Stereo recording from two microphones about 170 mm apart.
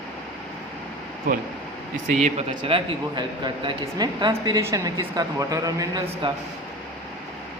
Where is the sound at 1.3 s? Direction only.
55° right (ahead or behind).